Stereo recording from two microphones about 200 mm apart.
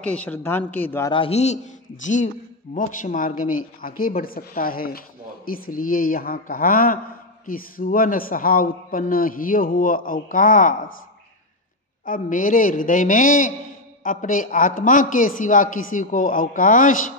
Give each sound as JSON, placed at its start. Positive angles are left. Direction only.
{"t": 0.0, "sound": "a man's voice", "side_deg": 5}
{"t": 1.1, "sound": "a man's voice", "side_deg": 30}
{"t": 12.0, "sound": "a man's voice", "side_deg": 45}